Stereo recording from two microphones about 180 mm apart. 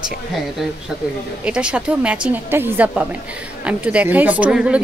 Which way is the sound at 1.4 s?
5° right (ahead or behind).